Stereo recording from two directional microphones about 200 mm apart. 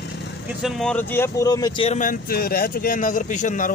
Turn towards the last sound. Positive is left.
turn(degrees=40)  # may be behind; listen again after turning